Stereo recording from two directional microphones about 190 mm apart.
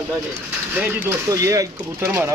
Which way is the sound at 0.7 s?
10° right (ahead or behind).